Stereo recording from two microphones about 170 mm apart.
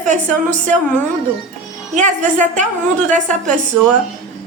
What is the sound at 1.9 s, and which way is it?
Speech, 45° right (ahead or behind).